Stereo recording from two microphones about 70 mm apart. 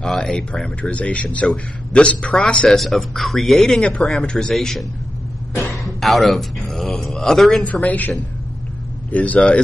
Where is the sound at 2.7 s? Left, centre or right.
Centre.